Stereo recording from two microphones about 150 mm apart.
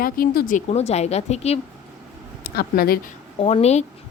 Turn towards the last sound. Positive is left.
turn(degrees=45)  # may be behind; listen again after turning